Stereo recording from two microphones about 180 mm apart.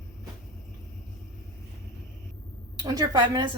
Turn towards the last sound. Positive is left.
turn(degrees=-20)  # may be behind; listen again after turning